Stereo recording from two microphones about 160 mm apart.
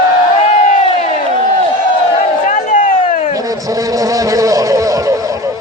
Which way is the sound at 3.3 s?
20° right (ahead or behind).